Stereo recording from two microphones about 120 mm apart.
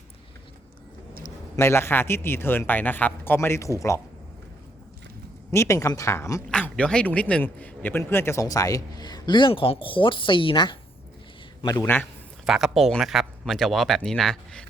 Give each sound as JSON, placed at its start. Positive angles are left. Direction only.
{"t": 1.5, "sound": "a man's voice", "side_deg": 20}
{"t": 5.5, "sound": "a man's voice", "side_deg": 25}
{"t": 6.5, "sound": "a man's voice", "side_deg": 10}
{"t": 12.5, "sound": "speech", "side_deg": 0}